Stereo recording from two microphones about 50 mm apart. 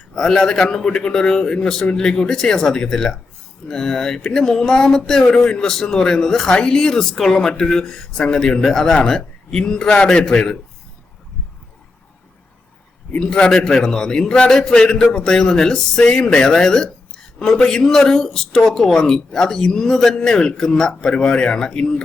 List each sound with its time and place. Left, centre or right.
0.1 s a man's voice: centre
13.1 s a man's voice: centre